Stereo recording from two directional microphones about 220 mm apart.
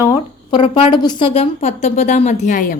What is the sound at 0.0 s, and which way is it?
A woman's voice, 20° left (ahead or behind).